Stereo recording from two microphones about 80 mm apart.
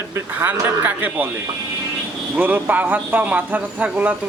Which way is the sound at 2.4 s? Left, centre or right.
Right.